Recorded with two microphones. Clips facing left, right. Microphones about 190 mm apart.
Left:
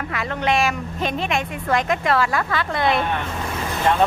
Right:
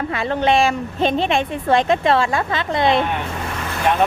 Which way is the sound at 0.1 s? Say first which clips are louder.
Right 4 dB; 30° right (ahead or behind).